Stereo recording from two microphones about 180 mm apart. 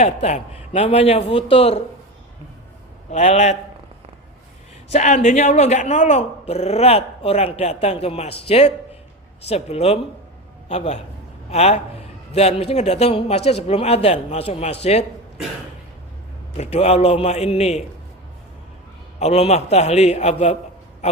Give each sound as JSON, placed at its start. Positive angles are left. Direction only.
{"t": 0.0, "sound": "speech", "side_deg": 40}
{"t": 3.1, "sound": "speech", "side_deg": 40}
{"t": 4.9, "sound": "speech", "side_deg": 40}
{"t": 16.6, "sound": "speech", "side_deg": 35}
{"t": 19.2, "sound": "speech", "side_deg": 35}